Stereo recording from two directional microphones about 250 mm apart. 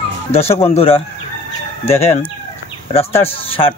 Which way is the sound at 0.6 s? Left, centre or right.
Left.